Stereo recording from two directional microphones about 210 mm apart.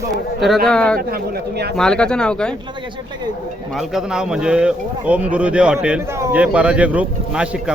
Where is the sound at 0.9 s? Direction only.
45° right (ahead or behind).